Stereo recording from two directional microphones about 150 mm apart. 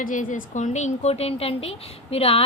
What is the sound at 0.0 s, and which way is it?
Speech, 60° left (ahead or behind).